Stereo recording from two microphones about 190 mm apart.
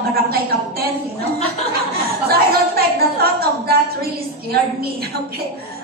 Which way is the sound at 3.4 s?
55° right (ahead or behind).